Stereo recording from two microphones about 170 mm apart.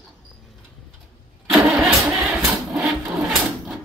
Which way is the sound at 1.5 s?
5° right (ahead or behind).